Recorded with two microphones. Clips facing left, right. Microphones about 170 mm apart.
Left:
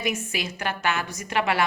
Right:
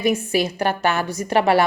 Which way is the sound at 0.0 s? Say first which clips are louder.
Right 9 dB; 35° right (ahead or behind).